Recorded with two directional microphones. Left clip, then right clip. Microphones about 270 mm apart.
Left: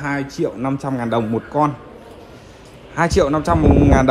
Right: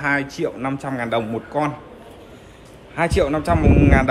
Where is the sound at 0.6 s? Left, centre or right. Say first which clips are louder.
Left 2 dB; centre.